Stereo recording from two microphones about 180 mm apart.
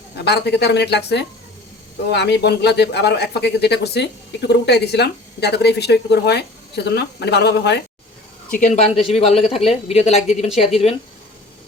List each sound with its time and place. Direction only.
0.3 s speech: 70° left (ahead or behind)
8.4 s a man's voice: 45° left (ahead or behind)